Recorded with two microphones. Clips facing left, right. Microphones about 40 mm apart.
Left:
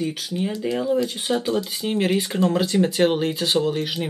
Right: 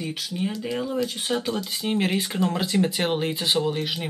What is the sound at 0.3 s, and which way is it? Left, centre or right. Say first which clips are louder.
Speech: left 2 dB; centre.